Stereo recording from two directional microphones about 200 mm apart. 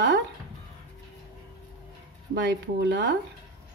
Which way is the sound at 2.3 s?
60° right (ahead or behind).